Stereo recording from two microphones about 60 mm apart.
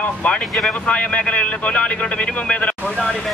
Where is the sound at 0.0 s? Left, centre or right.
Left.